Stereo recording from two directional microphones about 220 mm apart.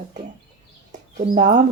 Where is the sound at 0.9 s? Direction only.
35° right (ahead or behind).